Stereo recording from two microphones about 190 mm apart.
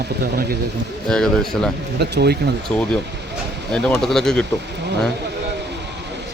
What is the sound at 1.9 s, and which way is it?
Speech, 60° right (ahead or behind).